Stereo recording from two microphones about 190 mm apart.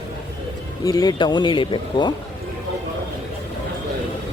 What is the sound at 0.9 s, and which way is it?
Speech, 20° left (ahead or behind).